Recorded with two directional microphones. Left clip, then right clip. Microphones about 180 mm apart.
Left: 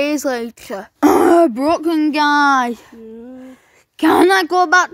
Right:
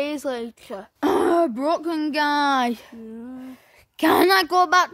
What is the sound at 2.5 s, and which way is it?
A woman's voice, 5° right (ahead or behind).